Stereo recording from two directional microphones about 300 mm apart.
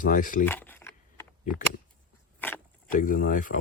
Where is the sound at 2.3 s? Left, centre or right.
Centre.